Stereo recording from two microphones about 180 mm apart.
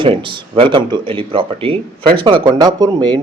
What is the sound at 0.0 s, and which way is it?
Speech, 30° right (ahead or behind).